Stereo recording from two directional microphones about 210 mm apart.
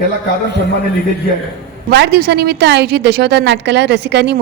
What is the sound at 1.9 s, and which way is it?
A woman's voice, 55° right (ahead or behind).